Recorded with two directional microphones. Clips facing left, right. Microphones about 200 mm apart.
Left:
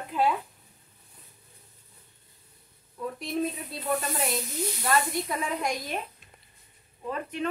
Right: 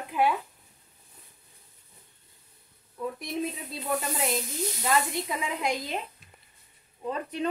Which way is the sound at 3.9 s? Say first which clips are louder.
Right 4 dB; 15° right (ahead or behind).